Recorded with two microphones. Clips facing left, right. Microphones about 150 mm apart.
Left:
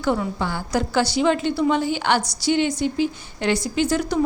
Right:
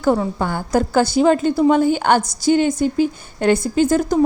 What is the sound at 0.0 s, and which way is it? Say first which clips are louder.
A woman's voice: right 5 dB; 45° right (ahead or behind).